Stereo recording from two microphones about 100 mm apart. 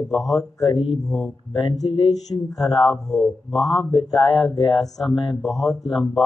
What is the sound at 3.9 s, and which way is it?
Speech, 50° left (ahead or behind).